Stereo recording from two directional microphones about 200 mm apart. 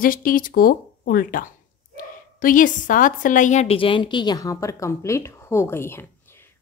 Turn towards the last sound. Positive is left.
turn(degrees=10)  # may be behind; listen again after turning